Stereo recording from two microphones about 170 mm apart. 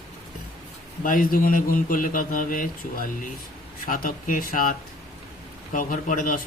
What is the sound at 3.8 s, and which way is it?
A man's voice, 55° left (ahead or behind).